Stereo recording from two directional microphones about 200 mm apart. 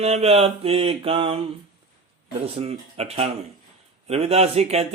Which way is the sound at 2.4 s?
30° right (ahead or behind).